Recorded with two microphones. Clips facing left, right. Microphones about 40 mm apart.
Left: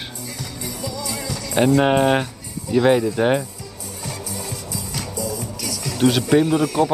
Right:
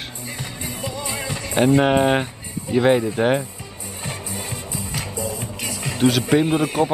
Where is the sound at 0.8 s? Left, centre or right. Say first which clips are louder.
Even; right.